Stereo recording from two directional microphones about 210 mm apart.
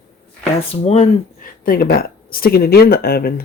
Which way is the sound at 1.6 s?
45° left (ahead or behind).